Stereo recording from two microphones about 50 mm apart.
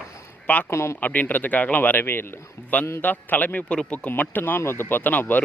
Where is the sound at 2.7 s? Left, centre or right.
Left.